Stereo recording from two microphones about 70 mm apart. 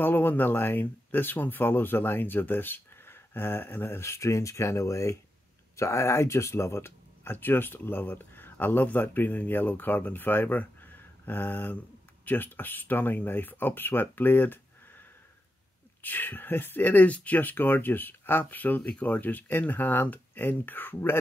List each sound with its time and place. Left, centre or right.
0.0 s speech: left